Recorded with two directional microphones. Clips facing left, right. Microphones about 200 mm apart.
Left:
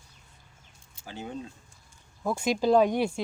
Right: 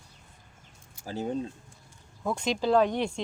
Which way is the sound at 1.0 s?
40° right (ahead or behind).